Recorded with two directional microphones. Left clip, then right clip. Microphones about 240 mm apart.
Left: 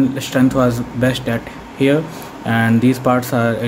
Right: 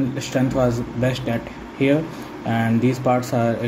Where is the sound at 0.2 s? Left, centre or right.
Centre.